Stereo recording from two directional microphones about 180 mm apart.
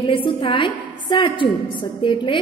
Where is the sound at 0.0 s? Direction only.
30° left (ahead or behind).